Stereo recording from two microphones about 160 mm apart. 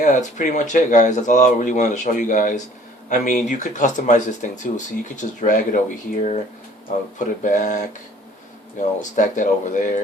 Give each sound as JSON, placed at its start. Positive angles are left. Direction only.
{"t": 0.0, "sound": "speech", "side_deg": 50}
{"t": 7.4, "sound": "speech", "side_deg": 50}
{"t": 9.0, "sound": "speech", "side_deg": 50}